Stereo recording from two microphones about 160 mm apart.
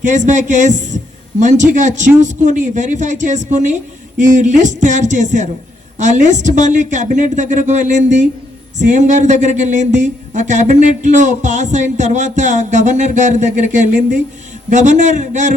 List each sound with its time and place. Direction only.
0.0 s speech: 50° right (ahead or behind)